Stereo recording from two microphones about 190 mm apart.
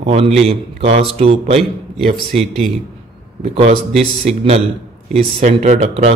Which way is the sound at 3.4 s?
30° right (ahead or behind).